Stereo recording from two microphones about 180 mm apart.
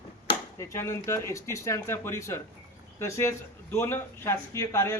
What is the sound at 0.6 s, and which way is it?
A man's voice, 15° left (ahead or behind).